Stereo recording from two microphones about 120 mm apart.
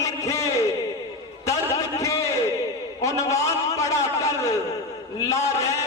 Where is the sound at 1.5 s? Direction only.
25° left (ahead or behind).